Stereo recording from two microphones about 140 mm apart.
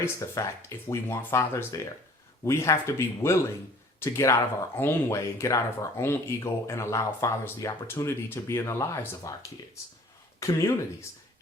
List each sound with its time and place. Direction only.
0.0 s speech: 20° left (ahead or behind)
10.4 s speech: 25° left (ahead or behind)